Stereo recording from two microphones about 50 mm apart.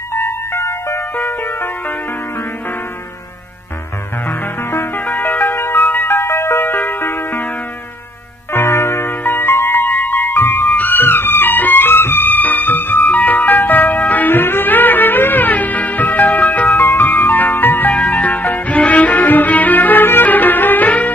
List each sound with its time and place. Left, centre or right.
0.1 s music: left
1.1 s music: left
4.3 s music: left
4.9 s music: left
5.4 s music: left
6.7 s music: left
8.5 s music: left
17.9 s music: left